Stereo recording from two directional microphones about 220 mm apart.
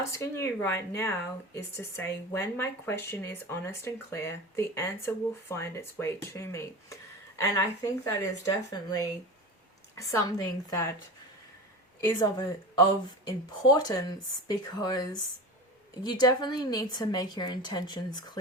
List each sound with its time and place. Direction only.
0.0 s speech: 10° left (ahead or behind)
11.9 s a woman's voice: 10° left (ahead or behind)